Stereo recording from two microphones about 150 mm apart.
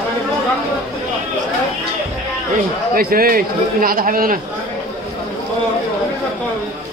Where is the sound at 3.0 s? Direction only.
75° right (ahead or behind).